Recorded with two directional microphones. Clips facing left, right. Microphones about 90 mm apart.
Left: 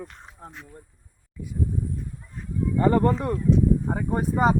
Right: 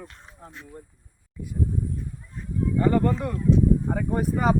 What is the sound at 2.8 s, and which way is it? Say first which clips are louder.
Speech: left 2 dB; 35° left (ahead or behind).